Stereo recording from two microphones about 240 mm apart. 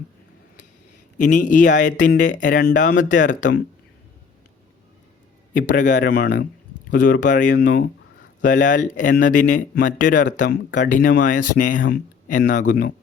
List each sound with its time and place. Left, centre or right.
1.2 s speech: left
5.5 s speech: left